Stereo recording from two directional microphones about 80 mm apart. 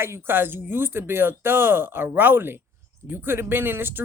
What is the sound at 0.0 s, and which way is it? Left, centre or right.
Speech, right.